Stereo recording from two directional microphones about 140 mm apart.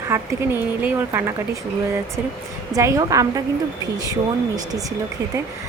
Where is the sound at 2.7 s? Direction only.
25° right (ahead or behind).